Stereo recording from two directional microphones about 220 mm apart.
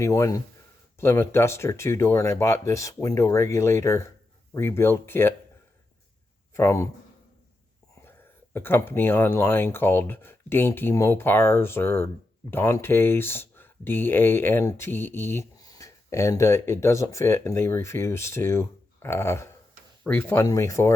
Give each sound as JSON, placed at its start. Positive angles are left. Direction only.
{"t": 0.0, "sound": "speech", "side_deg": 15}
{"t": 6.5, "sound": "speech", "side_deg": 15}
{"t": 8.5, "sound": "speech", "side_deg": 10}